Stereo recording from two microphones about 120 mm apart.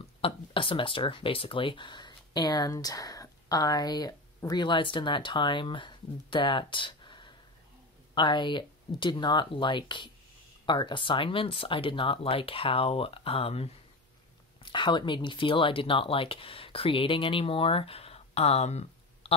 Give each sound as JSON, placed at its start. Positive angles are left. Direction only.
{"t": 0.2, "sound": "speech", "side_deg": 45}
{"t": 14.6, "sound": "speech", "side_deg": 40}